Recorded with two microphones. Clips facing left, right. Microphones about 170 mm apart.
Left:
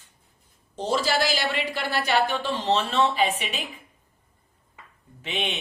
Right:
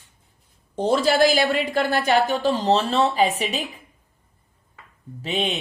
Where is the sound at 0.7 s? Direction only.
55° right (ahead or behind).